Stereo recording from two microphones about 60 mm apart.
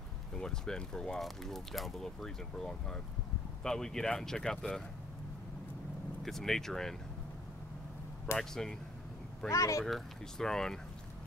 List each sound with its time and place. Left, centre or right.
0.3 s speech: centre
6.2 s speech: centre
8.4 s speech: centre
9.5 s speech: left
9.8 s speech: centre